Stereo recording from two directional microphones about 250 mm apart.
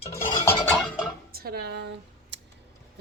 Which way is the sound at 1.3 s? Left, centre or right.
Right.